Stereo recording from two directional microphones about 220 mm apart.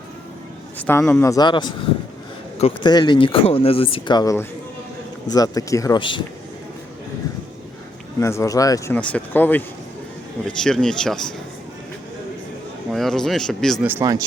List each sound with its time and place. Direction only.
0.8 s speech: 10° left (ahead or behind)
8.2 s speech: 15° left (ahead or behind)
12.9 s speech: centre (ahead or behind)
13.8 s speech: 15° right (ahead or behind)